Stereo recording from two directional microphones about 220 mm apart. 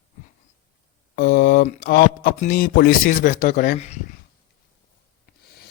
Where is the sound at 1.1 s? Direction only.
40° left (ahead or behind).